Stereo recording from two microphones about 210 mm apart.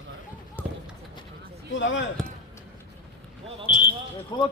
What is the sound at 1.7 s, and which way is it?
Speech, 60° left (ahead or behind).